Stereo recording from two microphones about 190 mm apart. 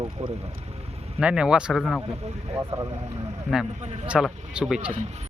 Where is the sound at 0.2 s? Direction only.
35° right (ahead or behind).